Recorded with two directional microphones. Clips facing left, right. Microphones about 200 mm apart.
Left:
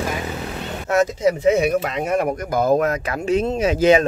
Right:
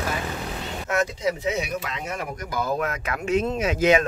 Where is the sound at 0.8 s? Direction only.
40° left (ahead or behind).